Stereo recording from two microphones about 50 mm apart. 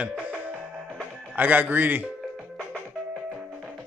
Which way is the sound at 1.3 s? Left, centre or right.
Right.